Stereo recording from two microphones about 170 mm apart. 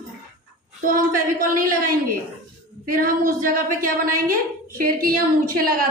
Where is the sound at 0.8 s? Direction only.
55° right (ahead or behind).